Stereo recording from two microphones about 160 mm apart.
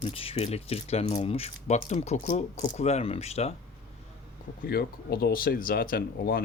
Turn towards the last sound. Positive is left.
turn(degrees=70)  # may be behind; listen again after turning